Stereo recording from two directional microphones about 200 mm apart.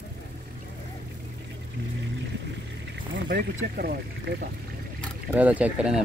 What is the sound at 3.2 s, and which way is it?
Speech, 50° right (ahead or behind).